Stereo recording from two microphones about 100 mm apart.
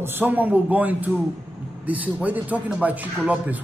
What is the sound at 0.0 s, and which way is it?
A man's voice, 20° right (ahead or behind).